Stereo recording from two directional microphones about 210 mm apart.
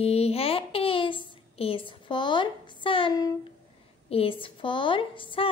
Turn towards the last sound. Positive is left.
turn(degrees=25)  # may be behind; listen again after turning